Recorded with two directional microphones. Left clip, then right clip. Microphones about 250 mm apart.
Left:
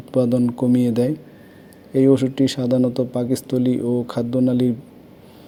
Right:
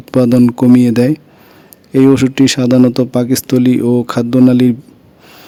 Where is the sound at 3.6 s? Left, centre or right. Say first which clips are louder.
Right 9 dB; right.